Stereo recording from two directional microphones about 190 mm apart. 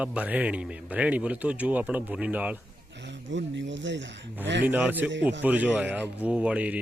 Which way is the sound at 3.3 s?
75° right (ahead or behind).